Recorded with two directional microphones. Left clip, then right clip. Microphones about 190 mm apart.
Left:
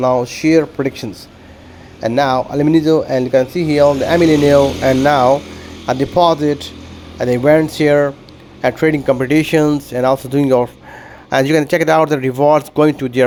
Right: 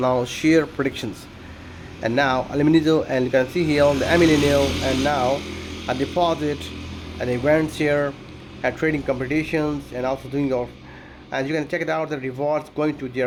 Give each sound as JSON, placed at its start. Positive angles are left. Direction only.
{"t": 0.0, "sound": "speech", "side_deg": 20}